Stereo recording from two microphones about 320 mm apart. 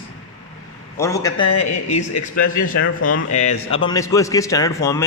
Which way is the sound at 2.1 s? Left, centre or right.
Left.